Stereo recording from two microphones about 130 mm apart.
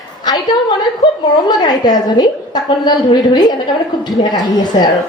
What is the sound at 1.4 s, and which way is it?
A woman's voice, 30° left (ahead or behind).